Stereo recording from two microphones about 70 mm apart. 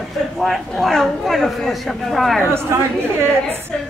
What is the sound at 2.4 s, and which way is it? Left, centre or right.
A woman's voice, right.